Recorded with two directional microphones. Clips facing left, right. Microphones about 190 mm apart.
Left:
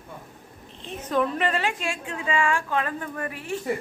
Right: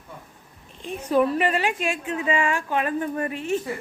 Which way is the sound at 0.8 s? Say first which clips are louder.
Right 4 dB; 10° right (ahead or behind).